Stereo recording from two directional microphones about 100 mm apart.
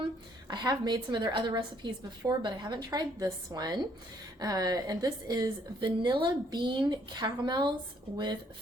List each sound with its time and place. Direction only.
0.4 s a woman's voice: 40° right (ahead or behind)
5.8 s a woman's voice: 50° right (ahead or behind)